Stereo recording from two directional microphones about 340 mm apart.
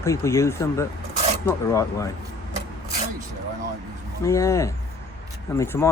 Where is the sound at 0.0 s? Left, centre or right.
Centre.